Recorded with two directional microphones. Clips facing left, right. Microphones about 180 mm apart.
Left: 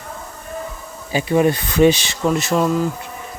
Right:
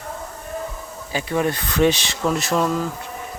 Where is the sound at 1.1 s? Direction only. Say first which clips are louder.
Left 6 dB; 10° left (ahead or behind).